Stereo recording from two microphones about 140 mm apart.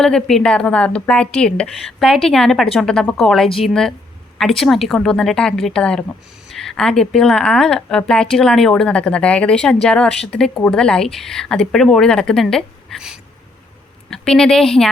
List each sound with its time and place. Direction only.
0.0 s a woman's voice: 5° left (ahead or behind)